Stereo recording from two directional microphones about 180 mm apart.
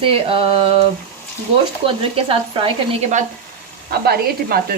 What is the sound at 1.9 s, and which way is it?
Speech, 30° right (ahead or behind).